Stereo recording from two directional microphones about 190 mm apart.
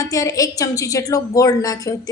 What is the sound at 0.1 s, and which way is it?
A woman's voice, 20° left (ahead or behind).